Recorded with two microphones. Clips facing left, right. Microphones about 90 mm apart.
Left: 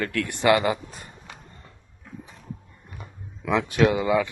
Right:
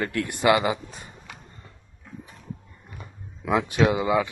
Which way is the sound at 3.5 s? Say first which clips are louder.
Even; 10° right (ahead or behind).